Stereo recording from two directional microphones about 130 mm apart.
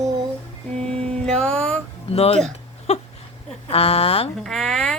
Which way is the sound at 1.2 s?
5° left (ahead or behind).